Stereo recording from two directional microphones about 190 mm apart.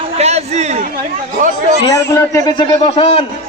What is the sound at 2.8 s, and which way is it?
Speech, 30° left (ahead or behind).